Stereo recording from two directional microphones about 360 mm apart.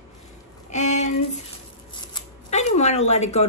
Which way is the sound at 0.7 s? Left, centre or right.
Centre.